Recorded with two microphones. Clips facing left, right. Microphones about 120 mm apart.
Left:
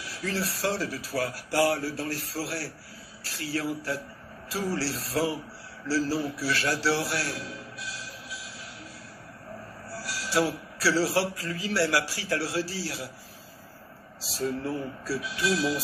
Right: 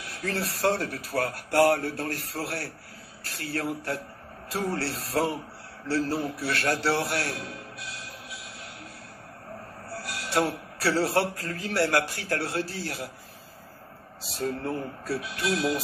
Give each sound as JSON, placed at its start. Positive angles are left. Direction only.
{"t": 0.0, "sound": "a man's voice", "side_deg": -55}
{"t": 9.8, "sound": "a man's voice", "side_deg": -55}
{"t": 14.2, "sound": "speech", "side_deg": -55}